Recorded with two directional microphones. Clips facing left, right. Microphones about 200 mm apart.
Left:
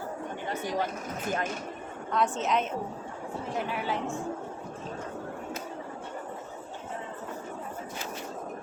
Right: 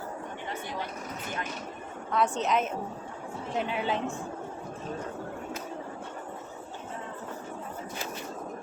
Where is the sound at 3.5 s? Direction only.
20° right (ahead or behind).